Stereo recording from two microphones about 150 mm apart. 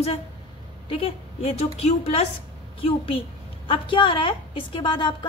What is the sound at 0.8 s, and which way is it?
A woman's voice, 40° left (ahead or behind).